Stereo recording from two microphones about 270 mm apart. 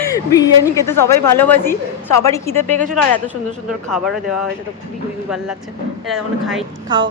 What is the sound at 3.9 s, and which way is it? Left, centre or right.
Speech, centre.